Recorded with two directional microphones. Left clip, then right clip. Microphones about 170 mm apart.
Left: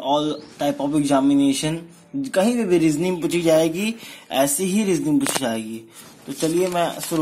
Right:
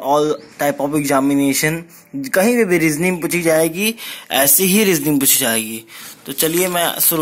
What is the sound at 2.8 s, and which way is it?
Speech, centre (ahead or behind).